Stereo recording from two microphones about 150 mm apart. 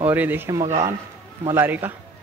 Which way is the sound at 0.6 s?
45° right (ahead or behind).